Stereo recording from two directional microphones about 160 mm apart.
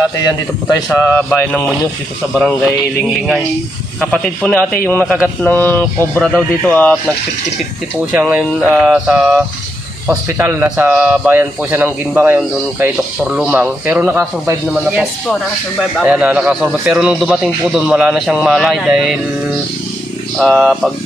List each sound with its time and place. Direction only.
0.2 s speech: 25° left (ahead or behind)
0.9 s speech: 10° left (ahead or behind)
8.1 s a man's voice: 10° right (ahead or behind)
14.7 s speech: centre (ahead or behind)
20.3 s speech: 5° left (ahead or behind)